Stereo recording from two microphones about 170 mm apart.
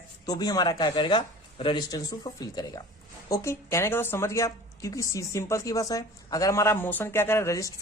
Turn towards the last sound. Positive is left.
turn(degrees=20)  # may be behind; listen again after turning